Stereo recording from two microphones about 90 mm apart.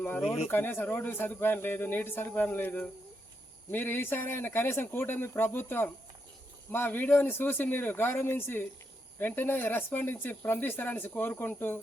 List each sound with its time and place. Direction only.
0.5 s speech: 20° left (ahead or behind)